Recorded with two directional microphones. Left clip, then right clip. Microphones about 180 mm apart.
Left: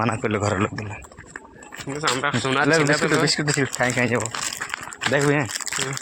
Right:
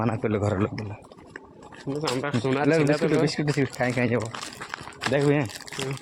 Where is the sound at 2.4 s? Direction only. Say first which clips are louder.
Left 2 dB; 15° right (ahead or behind).